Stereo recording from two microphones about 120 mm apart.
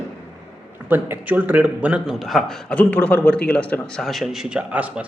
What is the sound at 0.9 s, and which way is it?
A man's voice, 15° right (ahead or behind).